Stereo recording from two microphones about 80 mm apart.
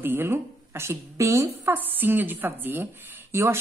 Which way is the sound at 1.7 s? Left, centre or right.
Right.